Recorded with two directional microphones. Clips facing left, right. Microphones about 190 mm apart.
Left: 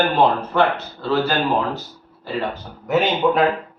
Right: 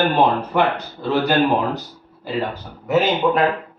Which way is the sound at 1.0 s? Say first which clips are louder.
Right 3 dB; 15° right (ahead or behind).